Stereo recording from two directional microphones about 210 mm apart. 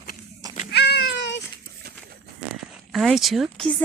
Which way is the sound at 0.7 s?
50° left (ahead or behind).